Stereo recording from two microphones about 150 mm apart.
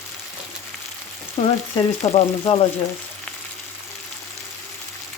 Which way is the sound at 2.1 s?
45° left (ahead or behind).